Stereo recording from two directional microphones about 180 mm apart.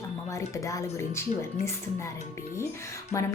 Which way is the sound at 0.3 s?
15° left (ahead or behind).